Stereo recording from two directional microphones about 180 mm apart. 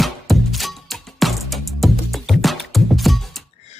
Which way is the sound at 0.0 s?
Centre (ahead or behind).